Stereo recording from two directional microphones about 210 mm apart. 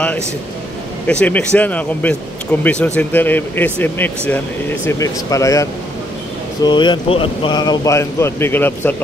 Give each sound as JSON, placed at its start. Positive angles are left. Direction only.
{"t": 1.2, "sound": "speech", "side_deg": 5}